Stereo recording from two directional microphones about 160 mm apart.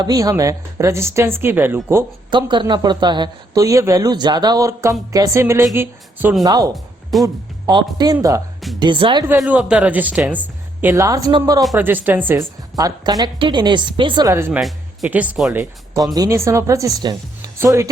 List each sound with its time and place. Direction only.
0.0 s speech: 25° right (ahead or behind)
2.3 s speech: 30° right (ahead or behind)
6.7 s music: centre (ahead or behind)
7.7 s speech: 25° right (ahead or behind)
9.4 s speech: 5° right (ahead or behind); by 11.6 s 25° right (ahead or behind)
11.7 s speech: 10° right (ahead or behind)
16.1 s speech: 20° right (ahead or behind)